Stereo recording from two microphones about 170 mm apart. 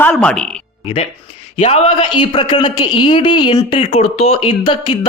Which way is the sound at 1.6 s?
35° left (ahead or behind).